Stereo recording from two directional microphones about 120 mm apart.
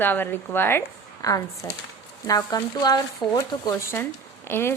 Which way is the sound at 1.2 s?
30° left (ahead or behind).